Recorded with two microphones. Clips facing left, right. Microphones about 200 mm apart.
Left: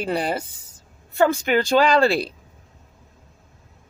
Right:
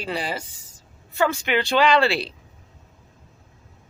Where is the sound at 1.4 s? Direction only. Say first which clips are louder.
Left 2 dB; 45° left (ahead or behind).